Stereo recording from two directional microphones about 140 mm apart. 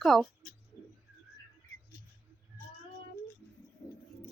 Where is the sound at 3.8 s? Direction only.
30° left (ahead or behind).